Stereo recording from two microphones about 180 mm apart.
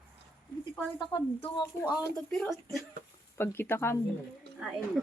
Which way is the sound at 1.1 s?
30° left (ahead or behind).